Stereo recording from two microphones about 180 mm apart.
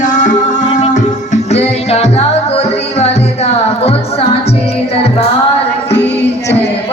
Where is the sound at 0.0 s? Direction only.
45° left (ahead or behind).